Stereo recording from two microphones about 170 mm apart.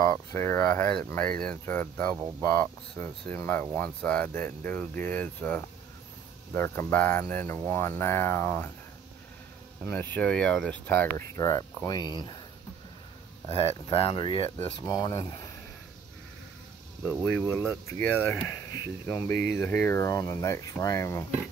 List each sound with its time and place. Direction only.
0.0 s speech: 20° left (ahead or behind)
0.9 s speech: 5° left (ahead or behind)
9.8 s speech: 10° left (ahead or behind); by 12.4 s 25° left (ahead or behind)
13.6 s speech: 35° left (ahead or behind)
17.2 s speech: 15° left (ahead or behind)